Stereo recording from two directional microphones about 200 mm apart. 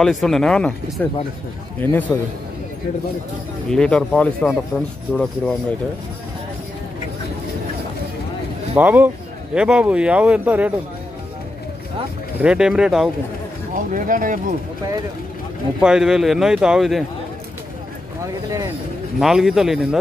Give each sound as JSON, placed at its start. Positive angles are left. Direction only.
{"t": 0.0, "sound": "a man's voice", "side_deg": 0}
{"t": 3.7, "sound": "speech", "side_deg": 5}
{"t": 8.7, "sound": "speech", "side_deg": -10}
{"t": 12.4, "sound": "speech", "side_deg": -5}
{"t": 13.7, "sound": "speech", "side_deg": -40}
{"t": 15.8, "sound": "speech", "side_deg": -5}
{"t": 18.2, "sound": "speech", "side_deg": -15}
{"t": 19.1, "sound": "speech", "side_deg": 0}